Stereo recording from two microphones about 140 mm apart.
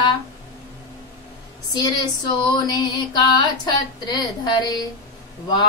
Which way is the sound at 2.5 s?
30° left (ahead or behind).